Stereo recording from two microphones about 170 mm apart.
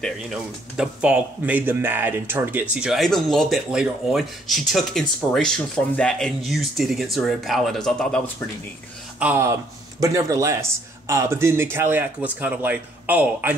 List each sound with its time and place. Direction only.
0.0 s speech: 5° right (ahead or behind)
9.2 s speech: 15° right (ahead or behind)